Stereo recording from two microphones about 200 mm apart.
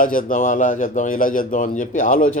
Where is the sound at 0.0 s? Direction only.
45° left (ahead or behind).